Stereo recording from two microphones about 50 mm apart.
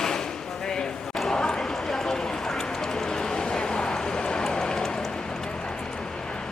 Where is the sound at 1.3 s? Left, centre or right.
Centre.